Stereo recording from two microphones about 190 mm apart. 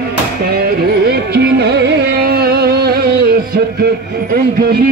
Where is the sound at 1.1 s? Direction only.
60° right (ahead or behind).